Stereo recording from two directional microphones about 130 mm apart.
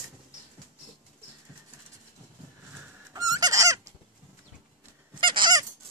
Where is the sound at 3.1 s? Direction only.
30° right (ahead or behind).